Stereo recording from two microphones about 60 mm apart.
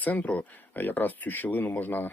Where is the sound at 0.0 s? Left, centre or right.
Left.